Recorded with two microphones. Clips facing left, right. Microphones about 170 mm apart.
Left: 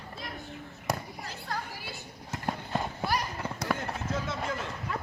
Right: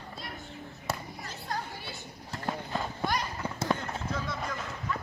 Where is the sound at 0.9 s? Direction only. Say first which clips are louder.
Left 3 dB; 15° left (ahead or behind).